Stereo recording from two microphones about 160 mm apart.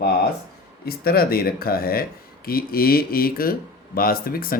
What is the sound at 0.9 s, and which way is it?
Speech, 70° left (ahead or behind).